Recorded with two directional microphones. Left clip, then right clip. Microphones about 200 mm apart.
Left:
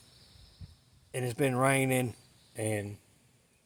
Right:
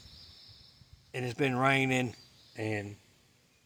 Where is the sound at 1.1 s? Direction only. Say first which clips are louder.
Left 1 dB; 45° left (ahead or behind).